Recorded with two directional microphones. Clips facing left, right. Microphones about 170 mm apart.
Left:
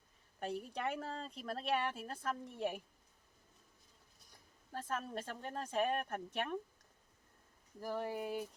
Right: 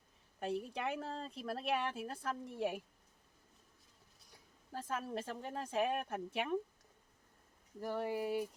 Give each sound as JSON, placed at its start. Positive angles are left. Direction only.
{"t": 0.3, "sound": "speech", "side_deg": 0}
{"t": 4.3, "sound": "speech", "side_deg": -5}
{"t": 7.8, "sound": "speech", "side_deg": 0}